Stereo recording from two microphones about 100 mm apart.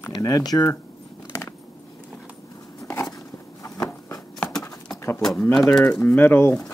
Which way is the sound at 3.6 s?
30° left (ahead or behind).